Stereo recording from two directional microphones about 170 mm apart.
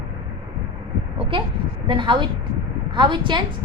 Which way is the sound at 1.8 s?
30° right (ahead or behind).